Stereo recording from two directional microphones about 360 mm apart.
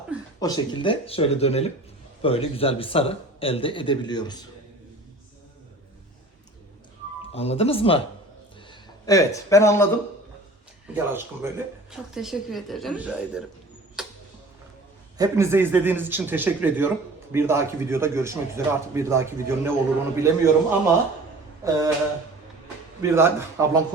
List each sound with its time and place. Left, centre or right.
0.3 s a man's voice: centre
7.3 s a man's voice: centre
9.0 s a man's voice: centre
10.9 s speech: centre
14.0 s a sound: centre
15.2 s speech: centre
21.6 s a sound: centre
23.0 s speech: centre